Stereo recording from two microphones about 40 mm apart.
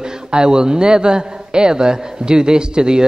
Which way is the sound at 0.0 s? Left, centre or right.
Centre.